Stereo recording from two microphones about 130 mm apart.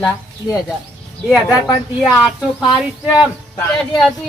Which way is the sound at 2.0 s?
Centre (ahead or behind).